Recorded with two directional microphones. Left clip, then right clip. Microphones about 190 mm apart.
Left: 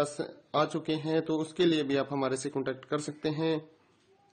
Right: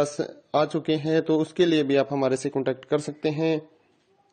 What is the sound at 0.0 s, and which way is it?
Speech, 30° right (ahead or behind).